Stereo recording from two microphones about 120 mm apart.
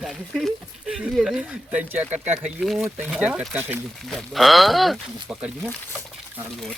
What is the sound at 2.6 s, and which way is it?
Speech, centre (ahead or behind).